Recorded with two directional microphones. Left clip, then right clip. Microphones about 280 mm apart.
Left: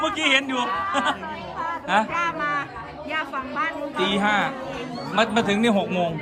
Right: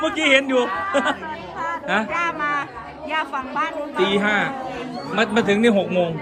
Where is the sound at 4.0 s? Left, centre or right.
Centre.